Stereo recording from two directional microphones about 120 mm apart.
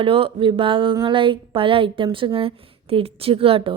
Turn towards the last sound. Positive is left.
turn(degrees=-50)  # may be behind; listen again after turning